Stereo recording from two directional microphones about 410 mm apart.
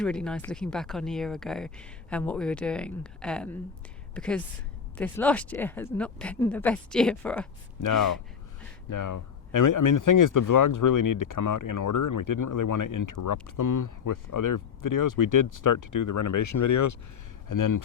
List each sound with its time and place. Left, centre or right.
0.0 s speech: centre
7.8 s speech: left